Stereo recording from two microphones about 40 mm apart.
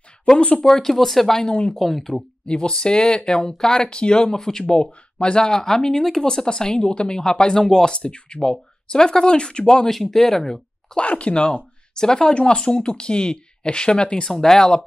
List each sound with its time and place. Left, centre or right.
0.4 s speech: left
0.7 s speech: centre
1.5 s speech: left
1.8 s speech: centre
2.4 s speech: left
7.9 s speech: left
9.8 s speech: centre
11.0 s speech: left
14.3 s speech: centre